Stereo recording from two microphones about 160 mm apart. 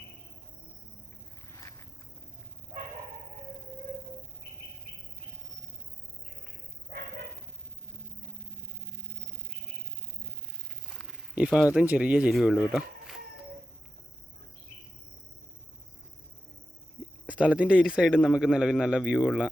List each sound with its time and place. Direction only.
1.5 s walk: 20° left (ahead or behind)
11.0 s speech: 5° right (ahead or behind)
17.2 s a man's voice: 5° right (ahead or behind)